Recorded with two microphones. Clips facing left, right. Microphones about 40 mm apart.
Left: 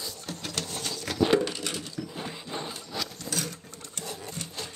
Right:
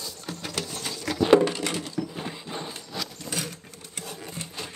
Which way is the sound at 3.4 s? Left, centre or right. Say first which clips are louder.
Even; centre.